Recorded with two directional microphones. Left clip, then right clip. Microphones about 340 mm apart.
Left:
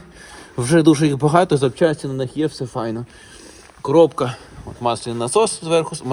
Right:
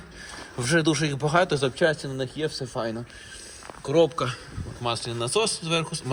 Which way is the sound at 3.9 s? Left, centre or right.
Centre.